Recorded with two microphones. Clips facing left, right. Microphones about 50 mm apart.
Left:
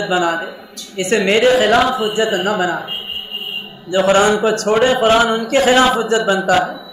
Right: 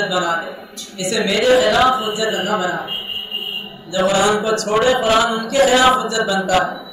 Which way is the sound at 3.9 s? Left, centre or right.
Left.